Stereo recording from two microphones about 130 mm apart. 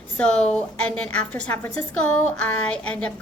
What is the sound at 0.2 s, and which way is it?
A woman's voice, 5° left (ahead or behind).